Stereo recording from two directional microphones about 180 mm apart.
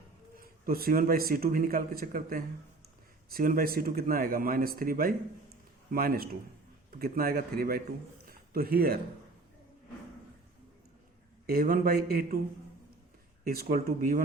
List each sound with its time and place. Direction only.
0.3 s speech: 55° right (ahead or behind)
8.3 s a sound: 55° right (ahead or behind)
11.4 s speech: 55° right (ahead or behind)
13.4 s speech: 55° right (ahead or behind)